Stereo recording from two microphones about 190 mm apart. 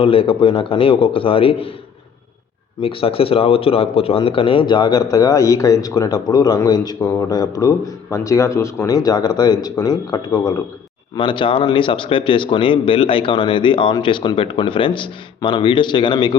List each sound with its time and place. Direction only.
0.0 s a man's voice: 30° left (ahead or behind)
2.8 s a man's voice: 30° left (ahead or behind)